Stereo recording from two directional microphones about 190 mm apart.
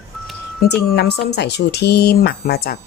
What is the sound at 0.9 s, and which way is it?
A woman's voice, 60° left (ahead or behind).